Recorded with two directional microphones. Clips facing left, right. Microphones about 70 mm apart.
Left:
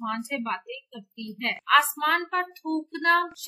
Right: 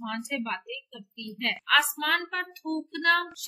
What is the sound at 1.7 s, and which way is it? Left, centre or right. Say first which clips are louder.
Speech: left 4 dB; left.